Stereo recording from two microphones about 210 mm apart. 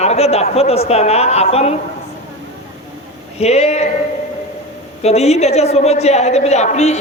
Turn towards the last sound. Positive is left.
turn(degrees=35)  # may be behind; listen again after turning